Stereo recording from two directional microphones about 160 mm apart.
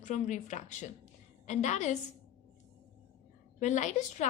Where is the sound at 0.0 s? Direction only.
50° left (ahead or behind).